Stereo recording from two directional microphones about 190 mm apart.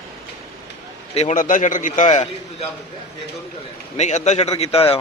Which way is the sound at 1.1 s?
35° left (ahead or behind).